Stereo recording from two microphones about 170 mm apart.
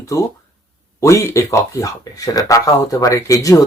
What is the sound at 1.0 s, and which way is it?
Speech, 15° left (ahead or behind).